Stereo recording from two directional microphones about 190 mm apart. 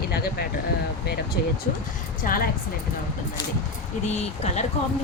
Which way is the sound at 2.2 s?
50° left (ahead or behind).